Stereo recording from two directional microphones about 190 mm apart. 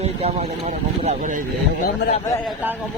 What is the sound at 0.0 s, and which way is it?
Speech, 35° right (ahead or behind).